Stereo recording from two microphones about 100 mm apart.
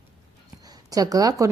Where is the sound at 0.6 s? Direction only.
40° right (ahead or behind).